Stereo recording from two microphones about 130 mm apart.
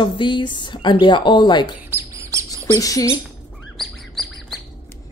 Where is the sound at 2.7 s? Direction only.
25° left (ahead or behind).